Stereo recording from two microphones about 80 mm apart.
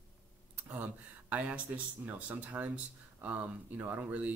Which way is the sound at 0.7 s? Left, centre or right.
Right.